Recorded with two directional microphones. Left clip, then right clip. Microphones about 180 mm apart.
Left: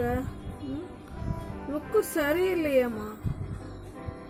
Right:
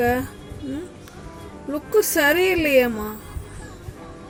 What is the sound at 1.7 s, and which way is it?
A woman's voice, 20° right (ahead or behind).